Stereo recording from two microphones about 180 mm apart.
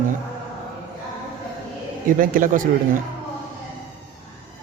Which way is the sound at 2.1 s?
50° right (ahead or behind).